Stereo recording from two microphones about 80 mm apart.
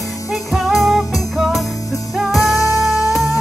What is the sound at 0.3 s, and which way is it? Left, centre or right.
Music, centre.